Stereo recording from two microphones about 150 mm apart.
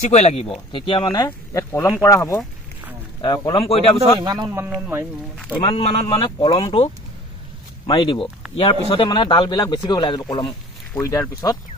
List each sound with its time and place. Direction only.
0.0 s speech: 45° left (ahead or behind); by 2.4 s 15° left (ahead or behind)
3.2 s speech: 30° left (ahead or behind)
4.2 s speech: 30° right (ahead or behind)
4.5 s speech: 10° right (ahead or behind)
5.6 s speech: 40° left (ahead or behind)
6.1 s speech: 25° left (ahead or behind)
7.8 s speech: 35° left (ahead or behind)